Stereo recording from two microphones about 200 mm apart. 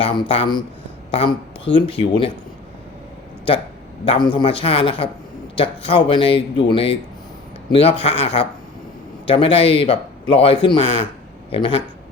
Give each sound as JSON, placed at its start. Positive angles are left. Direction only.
{"t": 0.0, "sound": "a man's voice", "side_deg": 25}
{"t": 4.0, "sound": "a man's voice", "side_deg": 25}